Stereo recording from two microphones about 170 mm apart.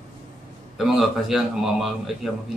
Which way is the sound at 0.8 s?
Centre (ahead or behind).